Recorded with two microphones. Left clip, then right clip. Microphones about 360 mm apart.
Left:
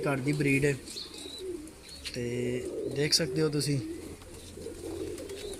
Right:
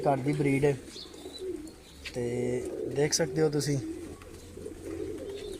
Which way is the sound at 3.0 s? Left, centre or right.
Right.